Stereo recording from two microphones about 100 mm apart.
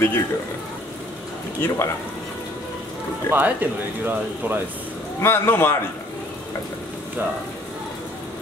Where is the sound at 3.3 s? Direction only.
20° right (ahead or behind).